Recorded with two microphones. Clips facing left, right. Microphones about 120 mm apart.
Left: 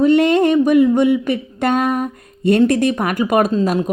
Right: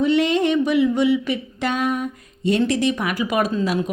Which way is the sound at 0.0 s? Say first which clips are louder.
Left 5 dB; 50° left (ahead or behind).